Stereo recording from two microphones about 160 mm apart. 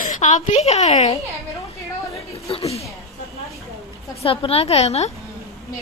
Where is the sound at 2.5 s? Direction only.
35° left (ahead or behind).